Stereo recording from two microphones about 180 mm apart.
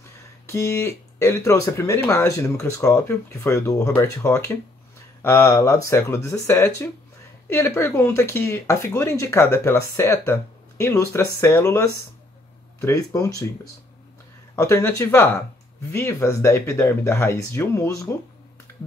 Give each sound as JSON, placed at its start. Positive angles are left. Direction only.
{"t": 0.5, "sound": "speech", "side_deg": 15}
{"t": 14.5, "sound": "speech", "side_deg": 15}